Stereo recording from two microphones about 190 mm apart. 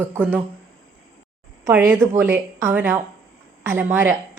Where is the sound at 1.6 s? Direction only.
10° right (ahead or behind).